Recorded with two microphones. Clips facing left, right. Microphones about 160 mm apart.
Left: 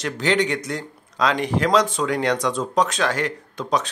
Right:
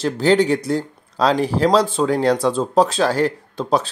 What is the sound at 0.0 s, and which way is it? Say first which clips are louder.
Speech: right 6 dB; 35° right (ahead or behind).